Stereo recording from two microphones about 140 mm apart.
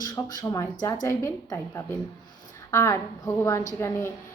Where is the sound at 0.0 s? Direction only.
25° left (ahead or behind).